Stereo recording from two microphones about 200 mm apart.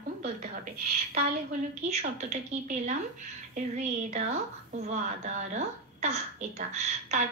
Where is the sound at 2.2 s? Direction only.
35° right (ahead or behind).